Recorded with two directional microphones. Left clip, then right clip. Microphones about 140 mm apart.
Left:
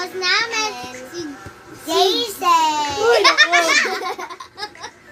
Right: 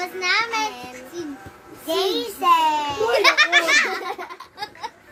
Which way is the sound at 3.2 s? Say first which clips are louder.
Even; 30° right (ahead or behind).